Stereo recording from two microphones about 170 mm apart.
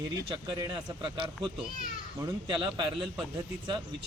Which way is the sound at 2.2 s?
25° right (ahead or behind).